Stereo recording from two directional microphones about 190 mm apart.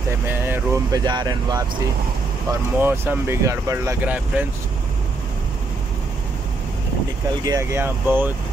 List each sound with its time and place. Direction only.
0.3 s speech: 15° right (ahead or behind)
2.8 s speech: 10° right (ahead or behind)
7.4 s speech: 15° right (ahead or behind)